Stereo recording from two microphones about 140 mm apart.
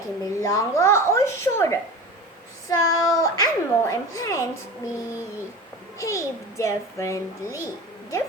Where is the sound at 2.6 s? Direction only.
25° left (ahead or behind).